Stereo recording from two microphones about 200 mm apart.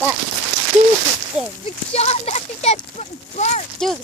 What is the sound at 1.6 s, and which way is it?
Speech, 30° left (ahead or behind).